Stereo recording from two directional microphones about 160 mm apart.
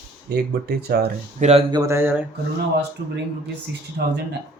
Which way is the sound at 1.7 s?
20° right (ahead or behind).